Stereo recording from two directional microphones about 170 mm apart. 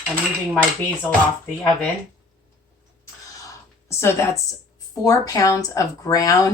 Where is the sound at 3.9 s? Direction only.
15° left (ahead or behind).